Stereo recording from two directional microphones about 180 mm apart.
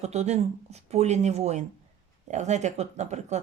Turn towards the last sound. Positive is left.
turn(degrees=-40)  # may be behind; listen again after turning